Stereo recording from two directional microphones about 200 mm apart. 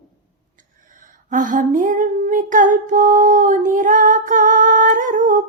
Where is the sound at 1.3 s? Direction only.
40° right (ahead or behind).